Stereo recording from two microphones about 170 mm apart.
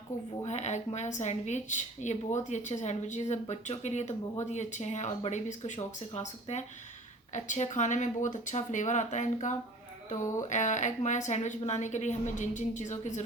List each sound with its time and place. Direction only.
0.1 s a woman's voice: 45° left (ahead or behind)